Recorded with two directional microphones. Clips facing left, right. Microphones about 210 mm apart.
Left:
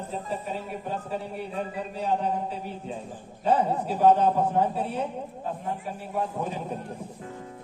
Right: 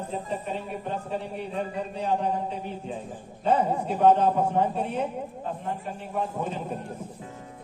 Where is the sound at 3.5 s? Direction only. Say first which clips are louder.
Even; 10° right (ahead or behind).